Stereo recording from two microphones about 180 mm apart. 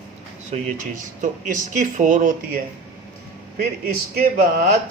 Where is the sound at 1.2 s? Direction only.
45° right (ahead or behind).